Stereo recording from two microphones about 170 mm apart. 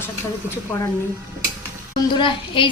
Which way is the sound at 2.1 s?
30° left (ahead or behind).